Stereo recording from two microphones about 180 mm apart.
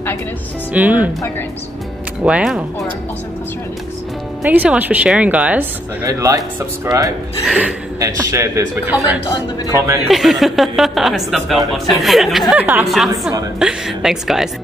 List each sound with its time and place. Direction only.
0.7 s speech: 10° right (ahead or behind)
2.2 s speech: 5° right (ahead or behind)
4.4 s speech: 5° right (ahead or behind)
6.0 s speech: 20° right (ahead or behind)
7.4 s speech: 5° right (ahead or behind)
10.0 s speech: centre (ahead or behind)